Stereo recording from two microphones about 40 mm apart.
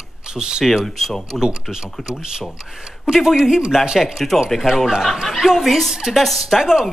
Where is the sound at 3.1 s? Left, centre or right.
Centre.